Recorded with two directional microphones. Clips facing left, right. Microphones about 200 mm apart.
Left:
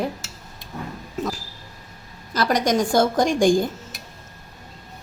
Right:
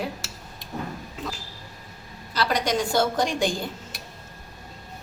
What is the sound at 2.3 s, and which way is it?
A woman's voice, 45° left (ahead or behind).